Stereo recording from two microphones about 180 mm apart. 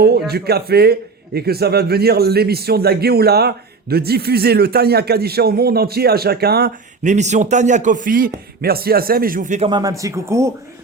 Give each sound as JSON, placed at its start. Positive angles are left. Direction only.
{"t": 0.0, "sound": "a man's voice", "side_deg": -60}
{"t": 7.0, "sound": "a man's voice", "side_deg": -40}
{"t": 9.6, "sound": "speech", "side_deg": -20}